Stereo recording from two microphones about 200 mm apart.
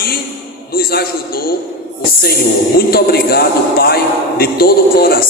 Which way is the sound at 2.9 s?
50° left (ahead or behind).